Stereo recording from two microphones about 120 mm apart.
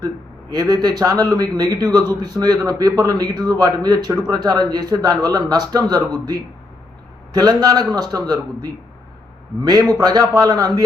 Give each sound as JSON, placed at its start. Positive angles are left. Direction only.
{"t": 0.5, "sound": "speech", "side_deg": -35}